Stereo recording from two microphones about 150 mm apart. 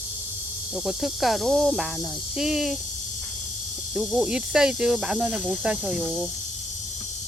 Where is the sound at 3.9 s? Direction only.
5° right (ahead or behind).